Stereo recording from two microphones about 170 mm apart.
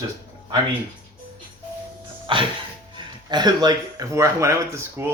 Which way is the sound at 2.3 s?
30° right (ahead or behind).